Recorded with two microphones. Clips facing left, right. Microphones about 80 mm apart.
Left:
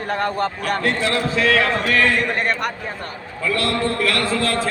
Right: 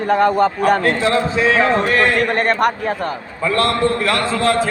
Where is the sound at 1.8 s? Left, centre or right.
Right.